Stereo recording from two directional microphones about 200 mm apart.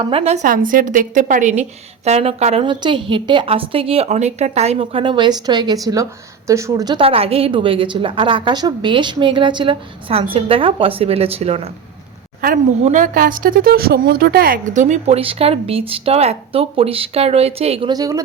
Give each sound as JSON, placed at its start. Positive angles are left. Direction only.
{"t": 0.0, "sound": "a woman's voice", "side_deg": -30}
{"t": 12.8, "sound": "speech", "side_deg": -40}